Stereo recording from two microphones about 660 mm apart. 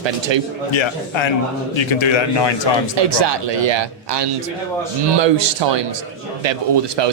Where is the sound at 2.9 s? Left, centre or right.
Right.